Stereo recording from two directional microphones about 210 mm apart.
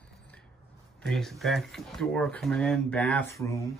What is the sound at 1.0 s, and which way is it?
Speech, centre (ahead or behind).